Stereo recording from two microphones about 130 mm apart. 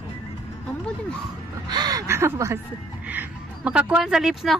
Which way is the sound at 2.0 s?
20° right (ahead or behind).